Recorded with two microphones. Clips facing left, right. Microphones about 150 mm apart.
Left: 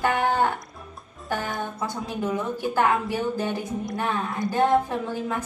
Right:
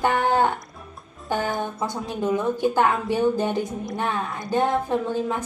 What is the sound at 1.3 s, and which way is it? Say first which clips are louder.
A woman's voice: right 4 dB; 20° right (ahead or behind).